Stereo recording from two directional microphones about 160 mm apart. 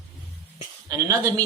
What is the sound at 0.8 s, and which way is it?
Speech, 20° right (ahead or behind).